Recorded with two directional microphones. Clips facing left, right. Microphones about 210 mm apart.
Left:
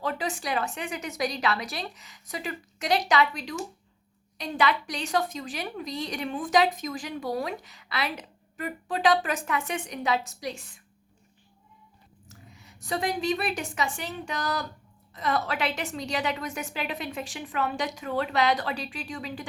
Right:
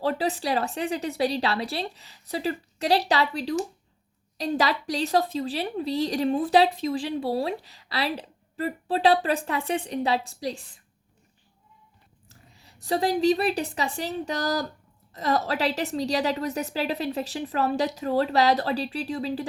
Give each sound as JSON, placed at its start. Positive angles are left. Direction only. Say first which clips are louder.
{"t": 0.0, "sound": "a woman's voice", "louder": "right 5 dB", "side_deg": -35}
{"t": 12.3, "sound": "a woman's voice", "louder": "left 4 dB", "side_deg": -35}